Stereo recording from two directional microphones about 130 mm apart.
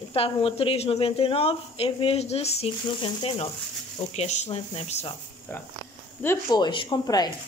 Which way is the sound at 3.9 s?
60° left (ahead or behind).